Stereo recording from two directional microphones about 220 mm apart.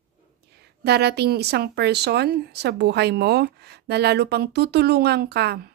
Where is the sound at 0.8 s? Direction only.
45° right (ahead or behind).